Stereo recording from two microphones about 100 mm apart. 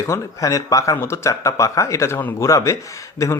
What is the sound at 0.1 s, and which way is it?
Speech, 35° left (ahead or behind).